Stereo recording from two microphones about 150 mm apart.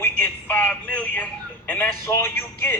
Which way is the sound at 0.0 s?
10° left (ahead or behind).